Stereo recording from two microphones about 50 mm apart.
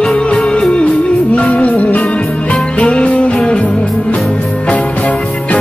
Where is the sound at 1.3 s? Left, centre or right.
Left.